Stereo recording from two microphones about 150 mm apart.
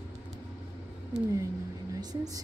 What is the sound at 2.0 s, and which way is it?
Speech, 25° right (ahead or behind).